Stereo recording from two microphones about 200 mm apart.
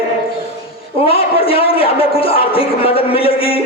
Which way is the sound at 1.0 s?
30° left (ahead or behind).